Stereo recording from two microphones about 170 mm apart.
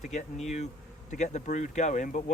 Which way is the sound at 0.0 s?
45° left (ahead or behind).